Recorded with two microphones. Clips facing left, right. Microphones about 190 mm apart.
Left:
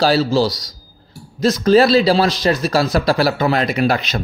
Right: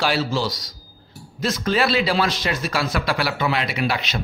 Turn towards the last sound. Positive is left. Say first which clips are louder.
# left 6 dB
turn(degrees=45)  # may be behind; listen again after turning